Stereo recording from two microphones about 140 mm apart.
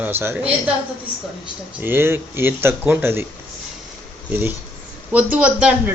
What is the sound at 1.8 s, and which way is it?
Speech, 15° right (ahead or behind).